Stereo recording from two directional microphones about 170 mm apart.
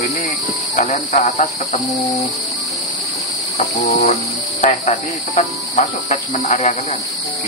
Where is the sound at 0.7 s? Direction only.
45° left (ahead or behind).